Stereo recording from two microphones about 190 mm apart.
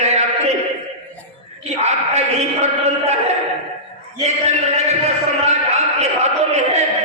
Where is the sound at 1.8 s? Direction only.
35° right (ahead or behind).